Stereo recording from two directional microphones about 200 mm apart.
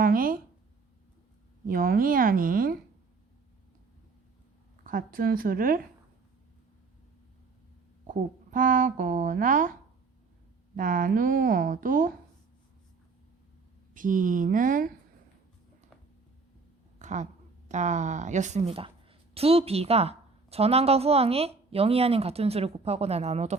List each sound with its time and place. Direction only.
0.0 s a sound: 45° right (ahead or behind)
1.6 s a woman's voice: 45° right (ahead or behind)
4.8 s a woman's voice: 45° right (ahead or behind)
8.0 s a woman's voice: 40° right (ahead or behind)
10.8 s a woman's voice: 45° right (ahead or behind)
13.9 s a woman's voice: 40° right (ahead or behind)
17.0 s a sound: 35° right (ahead or behind)
17.7 s a woman's voice: 35° right (ahead or behind)